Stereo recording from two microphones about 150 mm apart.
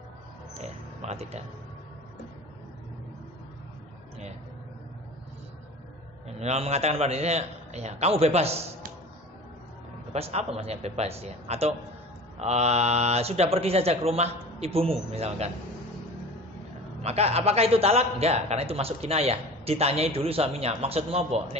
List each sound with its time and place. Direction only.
0.6 s a sound: 45° right (ahead or behind)
6.4 s a man's voice: 45° right (ahead or behind)
10.1 s a man's voice: 45° right (ahead or behind)
17.0 s a man's voice: 45° right (ahead or behind)